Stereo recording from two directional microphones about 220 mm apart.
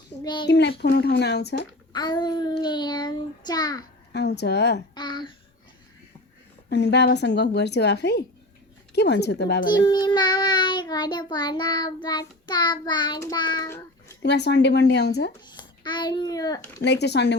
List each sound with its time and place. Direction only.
0.2 s a child's voice: 20° left (ahead or behind)
0.4 s speech: 50° left (ahead or behind)
1.9 s child singing: 20° left (ahead or behind)
4.1 s speech: 50° left (ahead or behind)
4.9 s child singing: 20° left (ahead or behind)
6.7 s speech: 50° left (ahead or behind)
9.6 s child singing: 20° left (ahead or behind)
14.2 s speech: 50° left (ahead or behind)
15.4 s a child's voice: 20° left (ahead or behind)
16.8 s speech: 50° left (ahead or behind)